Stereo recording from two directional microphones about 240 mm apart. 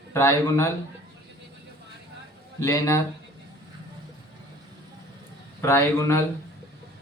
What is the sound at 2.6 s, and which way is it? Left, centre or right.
Speech, centre.